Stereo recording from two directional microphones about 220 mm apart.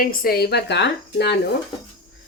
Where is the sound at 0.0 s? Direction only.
40° left (ahead or behind).